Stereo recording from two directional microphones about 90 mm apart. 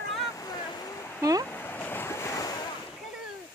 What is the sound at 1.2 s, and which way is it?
Speech, 40° right (ahead or behind).